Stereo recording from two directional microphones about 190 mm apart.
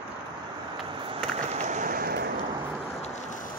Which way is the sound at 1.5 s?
40° right (ahead or behind).